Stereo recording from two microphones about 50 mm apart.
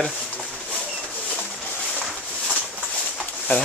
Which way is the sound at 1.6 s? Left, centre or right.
Left.